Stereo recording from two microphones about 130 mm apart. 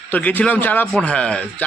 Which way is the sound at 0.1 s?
10° left (ahead or behind).